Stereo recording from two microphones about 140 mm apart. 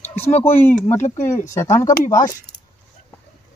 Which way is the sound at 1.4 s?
20° left (ahead or behind).